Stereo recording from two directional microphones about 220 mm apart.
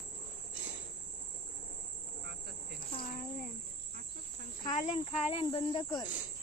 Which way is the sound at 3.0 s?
40° left (ahead or behind).